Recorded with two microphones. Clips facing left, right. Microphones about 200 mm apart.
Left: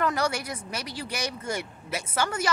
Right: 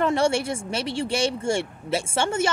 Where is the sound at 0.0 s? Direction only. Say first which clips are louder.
Right 6 dB; 25° right (ahead or behind).